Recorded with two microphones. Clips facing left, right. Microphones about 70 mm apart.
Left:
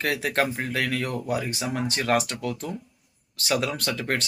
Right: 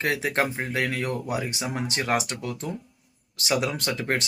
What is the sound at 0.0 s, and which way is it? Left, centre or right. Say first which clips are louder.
A man's voice: even; right.